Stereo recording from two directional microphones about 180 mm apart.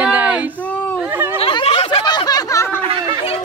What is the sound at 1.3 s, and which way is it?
Snicker, 30° left (ahead or behind).